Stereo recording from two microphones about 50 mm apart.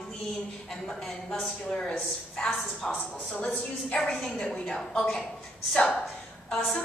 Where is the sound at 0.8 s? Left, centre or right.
Centre.